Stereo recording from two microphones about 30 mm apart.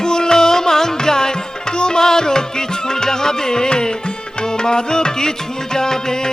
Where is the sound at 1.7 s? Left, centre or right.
Left.